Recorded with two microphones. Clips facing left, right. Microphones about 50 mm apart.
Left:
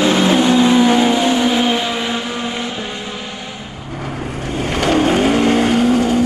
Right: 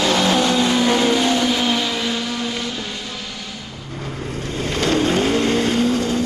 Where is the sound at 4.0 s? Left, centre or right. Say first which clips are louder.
Left 3 dB; centre.